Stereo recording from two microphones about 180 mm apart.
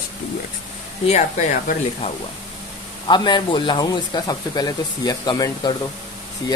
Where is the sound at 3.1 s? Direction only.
25° left (ahead or behind).